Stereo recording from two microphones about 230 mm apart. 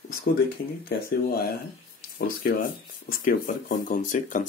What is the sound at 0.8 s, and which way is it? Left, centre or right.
Speech, left.